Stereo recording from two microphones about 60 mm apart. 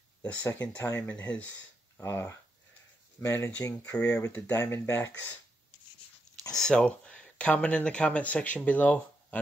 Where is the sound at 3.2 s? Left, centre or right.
Left.